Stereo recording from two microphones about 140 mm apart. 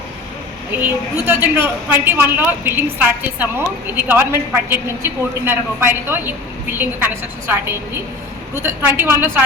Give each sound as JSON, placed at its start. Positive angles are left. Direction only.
{"t": 0.8, "sound": "a woman's voice", "side_deg": -15}